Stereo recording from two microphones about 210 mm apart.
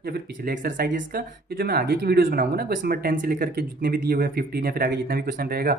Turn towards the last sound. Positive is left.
turn(degrees=-45)  # may be behind; listen again after turning